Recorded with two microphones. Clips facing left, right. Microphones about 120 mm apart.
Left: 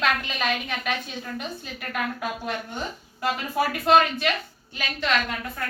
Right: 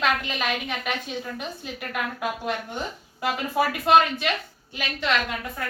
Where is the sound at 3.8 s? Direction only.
15° right (ahead or behind).